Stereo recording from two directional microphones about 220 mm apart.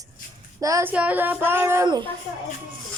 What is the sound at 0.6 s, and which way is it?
A child's voice, 10° right (ahead or behind).